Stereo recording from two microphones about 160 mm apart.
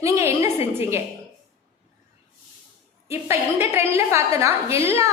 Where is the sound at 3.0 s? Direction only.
15° right (ahead or behind).